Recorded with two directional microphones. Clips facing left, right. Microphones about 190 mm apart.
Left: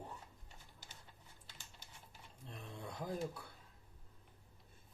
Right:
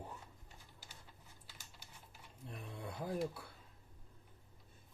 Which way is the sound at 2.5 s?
5° right (ahead or behind).